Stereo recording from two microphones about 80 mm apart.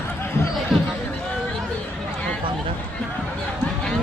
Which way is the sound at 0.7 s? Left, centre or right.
Centre.